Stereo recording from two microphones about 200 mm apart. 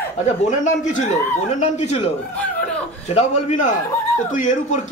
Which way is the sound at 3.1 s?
35° left (ahead or behind).